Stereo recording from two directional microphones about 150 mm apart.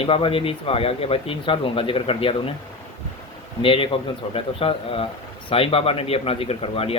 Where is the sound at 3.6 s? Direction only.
35° left (ahead or behind).